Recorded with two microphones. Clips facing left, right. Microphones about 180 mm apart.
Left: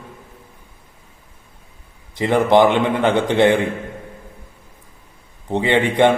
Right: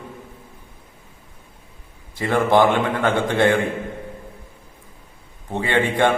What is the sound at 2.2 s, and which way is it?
Speech, 20° left (ahead or behind).